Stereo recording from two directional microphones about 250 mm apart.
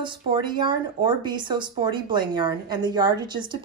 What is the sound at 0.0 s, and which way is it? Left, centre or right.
A woman's voice, centre.